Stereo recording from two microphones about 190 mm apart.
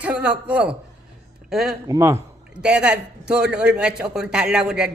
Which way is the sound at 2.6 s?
5° right (ahead or behind).